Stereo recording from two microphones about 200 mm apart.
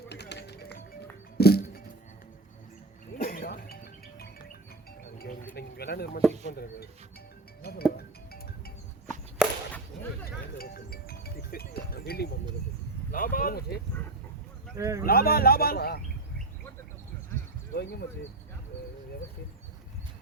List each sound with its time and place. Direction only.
0.1 s music: 60° left (ahead or behind)
3.2 s music: 45° left (ahead or behind)
5.1 s music: 50° left (ahead or behind)
5.5 s a sound: 55° left (ahead or behind)
6.5 s speech: 50° left (ahead or behind)
7.6 s music: 50° left (ahead or behind)
9.0 s chop: 5° left (ahead or behind)
10.2 s music: 50° left (ahead or behind)
13.1 s speech: 45° left (ahead or behind)
14.8 s speech: 15° right (ahead or behind)
15.0 s speech: 50° left (ahead or behind)
17.7 s speech: 55° left (ahead or behind)